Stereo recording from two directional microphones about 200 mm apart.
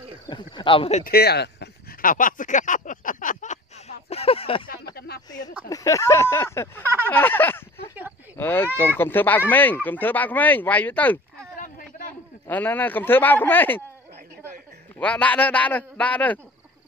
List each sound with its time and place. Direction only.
0.3 s speech: 25° left (ahead or behind)
1.0 s a sound: 50° left (ahead or behind); by 4.6 s 30° left (ahead or behind)
4.9 s a sound: 50° left (ahead or behind)
5.7 s speech: 15° left (ahead or behind)
12.4 s speech: 10° left (ahead or behind)
15.0 s speech: 5° left (ahead or behind)